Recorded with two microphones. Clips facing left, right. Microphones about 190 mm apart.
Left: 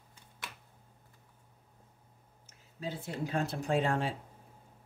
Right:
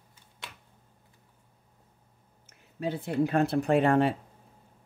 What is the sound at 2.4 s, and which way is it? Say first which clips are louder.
Speech: right 8 dB; 60° right (ahead or behind).